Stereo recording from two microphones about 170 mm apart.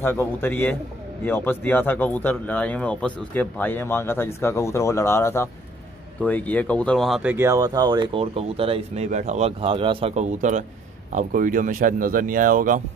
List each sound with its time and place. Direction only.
0.0 s speech: 10° left (ahead or behind); by 12.8 s 50° right (ahead or behind)